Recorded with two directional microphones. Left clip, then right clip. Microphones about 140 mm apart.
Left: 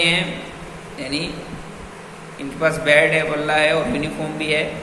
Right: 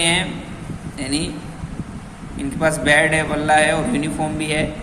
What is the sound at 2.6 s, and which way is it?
A man's voice, 70° right (ahead or behind).